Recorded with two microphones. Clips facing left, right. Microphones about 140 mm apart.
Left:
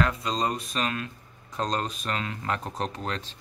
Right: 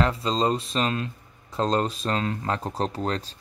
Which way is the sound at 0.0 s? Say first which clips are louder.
Right 3 dB; 25° right (ahead or behind).